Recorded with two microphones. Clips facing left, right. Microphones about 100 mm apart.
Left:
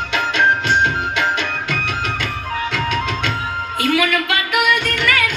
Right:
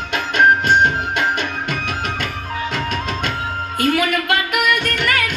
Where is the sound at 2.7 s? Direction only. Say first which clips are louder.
Left 3 dB; 45° right (ahead or behind).